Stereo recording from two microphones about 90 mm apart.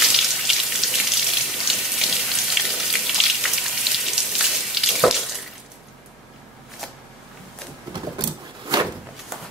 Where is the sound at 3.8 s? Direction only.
5° right (ahead or behind).